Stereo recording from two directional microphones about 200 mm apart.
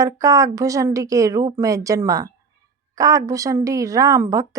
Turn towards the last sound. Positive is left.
turn(degrees=-15)  # may be behind; listen again after turning